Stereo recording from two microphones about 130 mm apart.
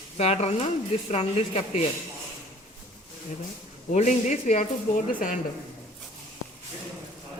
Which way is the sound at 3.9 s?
65° left (ahead or behind).